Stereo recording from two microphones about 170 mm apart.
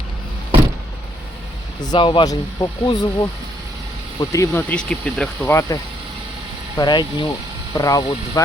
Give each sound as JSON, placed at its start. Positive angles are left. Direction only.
{"t": 1.8, "sound": "speech", "side_deg": 25}
{"t": 4.7, "sound": "speech", "side_deg": 5}
{"t": 5.5, "sound": "speech", "side_deg": 20}